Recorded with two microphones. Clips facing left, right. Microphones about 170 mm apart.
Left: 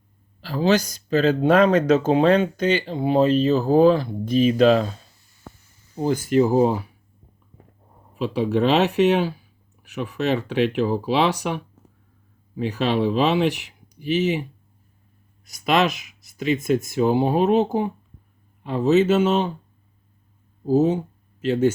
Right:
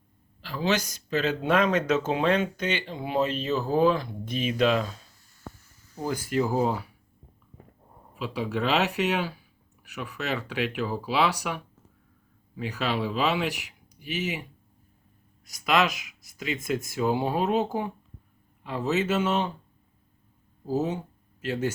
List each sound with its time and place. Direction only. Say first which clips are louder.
0.4 s speech: left 7 dB; 35° left (ahead or behind)
5.9 s speech: left 8 dB; 25° left (ahead or behind)
8.2 s speech: left 8 dB; 25° left (ahead or behind)
15.4 s speech: left 4 dB; 25° left (ahead or behind)
20.7 s speech: left 9 dB; 20° left (ahead or behind)